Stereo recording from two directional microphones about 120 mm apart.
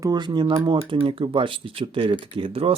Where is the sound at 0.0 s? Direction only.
35° right (ahead or behind).